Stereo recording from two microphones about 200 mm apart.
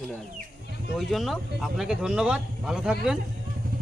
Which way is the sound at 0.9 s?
Centre (ahead or behind).